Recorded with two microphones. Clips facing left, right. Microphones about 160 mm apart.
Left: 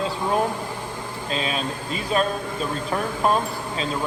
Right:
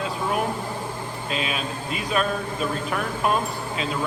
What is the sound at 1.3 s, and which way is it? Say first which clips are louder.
Speech: left 2 dB; 35° left (ahead or behind).